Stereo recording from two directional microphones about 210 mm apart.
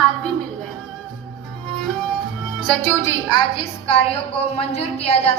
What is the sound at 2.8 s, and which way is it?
A woman's voice, 10° left (ahead or behind).